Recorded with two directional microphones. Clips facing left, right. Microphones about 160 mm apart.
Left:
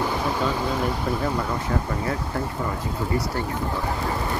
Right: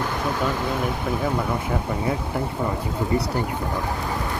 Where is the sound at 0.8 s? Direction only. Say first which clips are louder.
Even; centre (ahead or behind).